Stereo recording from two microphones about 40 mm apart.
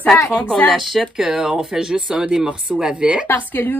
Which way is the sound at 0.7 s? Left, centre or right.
Centre.